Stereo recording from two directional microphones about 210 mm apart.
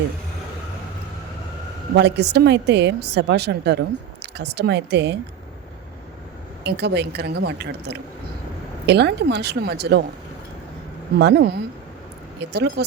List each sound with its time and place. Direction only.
2.0 s a woman's voice: 55° right (ahead or behind)
6.7 s a woman's voice: 50° right (ahead or behind)
11.2 s a woman's voice: 55° right (ahead or behind)